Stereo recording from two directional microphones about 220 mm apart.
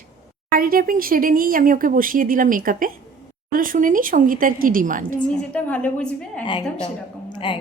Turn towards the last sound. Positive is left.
turn(degrees=20)  # may be behind; listen again after turning